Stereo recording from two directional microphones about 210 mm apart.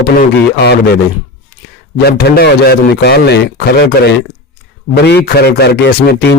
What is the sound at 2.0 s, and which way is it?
A man's voice, 50° left (ahead or behind).